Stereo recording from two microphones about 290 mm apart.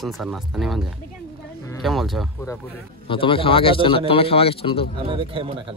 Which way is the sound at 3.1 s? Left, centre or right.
Centre.